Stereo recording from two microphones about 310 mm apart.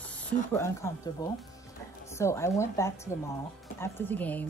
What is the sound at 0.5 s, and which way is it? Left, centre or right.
Speech, centre.